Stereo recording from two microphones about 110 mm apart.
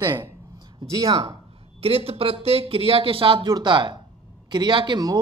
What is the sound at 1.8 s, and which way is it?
Speech, 65° right (ahead or behind).